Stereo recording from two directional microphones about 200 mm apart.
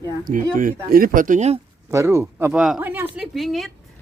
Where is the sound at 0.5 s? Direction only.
45° right (ahead or behind).